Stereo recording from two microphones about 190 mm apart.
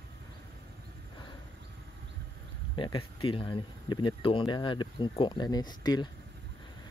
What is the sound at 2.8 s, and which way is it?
Speech, 25° left (ahead or behind).